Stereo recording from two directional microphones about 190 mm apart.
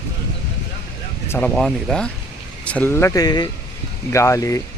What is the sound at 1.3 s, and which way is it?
Speech, 5° left (ahead or behind).